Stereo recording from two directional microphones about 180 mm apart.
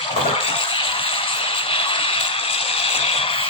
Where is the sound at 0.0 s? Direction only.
30° left (ahead or behind).